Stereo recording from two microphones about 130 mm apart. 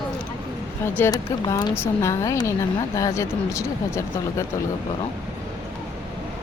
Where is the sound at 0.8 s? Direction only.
20° left (ahead or behind).